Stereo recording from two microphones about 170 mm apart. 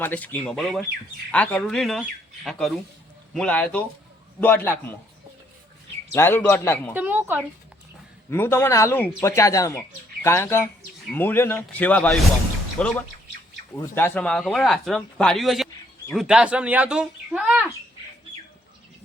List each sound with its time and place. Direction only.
0.0 s speech: 10° left (ahead or behind)
6.1 s speech: 15° left (ahead or behind)
6.9 s speech: 10° right (ahead or behind)
8.3 s speech: 15° left (ahead or behind); by 17.7 s 5° right (ahead or behind)